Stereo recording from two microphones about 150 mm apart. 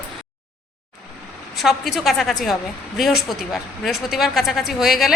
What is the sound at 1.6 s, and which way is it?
A woman's voice, centre (ahead or behind).